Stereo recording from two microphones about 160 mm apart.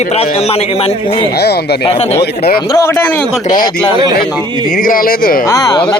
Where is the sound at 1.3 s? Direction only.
90° left.